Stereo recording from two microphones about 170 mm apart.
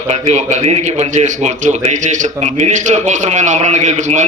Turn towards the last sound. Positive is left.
turn(degrees=-45)  # may be behind; listen again after turning